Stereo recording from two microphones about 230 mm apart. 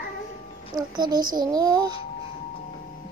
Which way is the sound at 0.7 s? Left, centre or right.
Centre.